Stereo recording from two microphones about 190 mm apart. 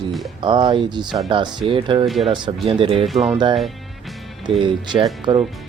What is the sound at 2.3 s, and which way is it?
Speech, 25° right (ahead or behind).